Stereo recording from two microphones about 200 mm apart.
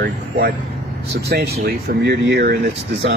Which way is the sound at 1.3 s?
50° right (ahead or behind).